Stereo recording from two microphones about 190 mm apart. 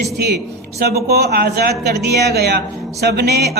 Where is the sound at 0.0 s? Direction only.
60° right (ahead or behind).